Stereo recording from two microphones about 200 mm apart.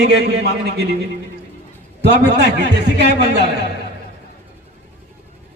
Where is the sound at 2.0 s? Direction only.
55° right (ahead or behind).